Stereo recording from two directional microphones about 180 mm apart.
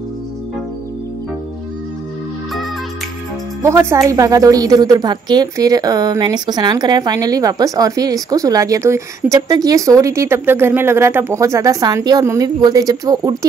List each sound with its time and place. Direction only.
3.6 s a woman's voice: 15° right (ahead or behind)